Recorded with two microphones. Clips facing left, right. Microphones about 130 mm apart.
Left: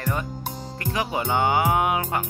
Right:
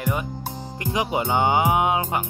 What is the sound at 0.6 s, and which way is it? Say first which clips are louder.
Speech: right 2 dB; 15° right (ahead or behind).